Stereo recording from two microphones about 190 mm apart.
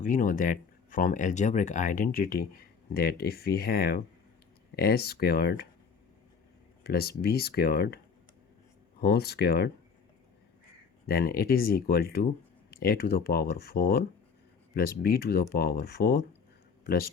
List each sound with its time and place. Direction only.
0.0 s speech: 45° left (ahead or behind)
6.8 s speech: 55° left (ahead or behind)
9.0 s speech: 55° left (ahead or behind)
11.0 s speech: 50° left (ahead or behind)